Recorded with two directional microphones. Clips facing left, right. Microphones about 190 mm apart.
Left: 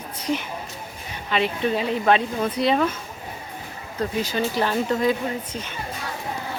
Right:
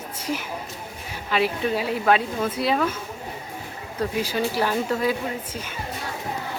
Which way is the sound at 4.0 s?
10° right (ahead or behind).